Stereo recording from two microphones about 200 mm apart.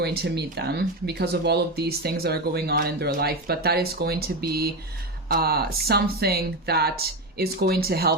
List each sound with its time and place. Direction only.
0.0 s speech: 55° right (ahead or behind)